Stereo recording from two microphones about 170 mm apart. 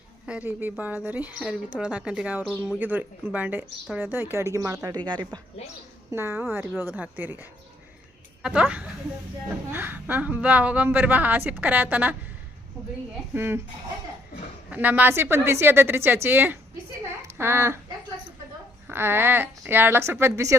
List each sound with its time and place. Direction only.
0.3 s a woman's voice: 10° right (ahead or behind); by 5.4 s 25° right (ahead or behind)
6.1 s a woman's voice: 15° right (ahead or behind)
13.3 s a woman's voice: 15° right (ahead or behind)
14.7 s a woman's voice: 10° right (ahead or behind)
18.9 s a woman's voice: 15° right (ahead or behind)